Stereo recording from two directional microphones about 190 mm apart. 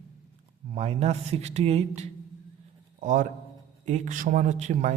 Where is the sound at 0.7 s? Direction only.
35° right (ahead or behind).